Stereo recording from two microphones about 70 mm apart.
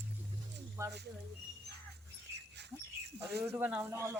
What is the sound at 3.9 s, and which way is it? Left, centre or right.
Speech, right.